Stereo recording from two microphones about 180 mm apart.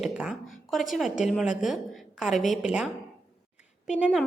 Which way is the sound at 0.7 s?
Centre (ahead or behind).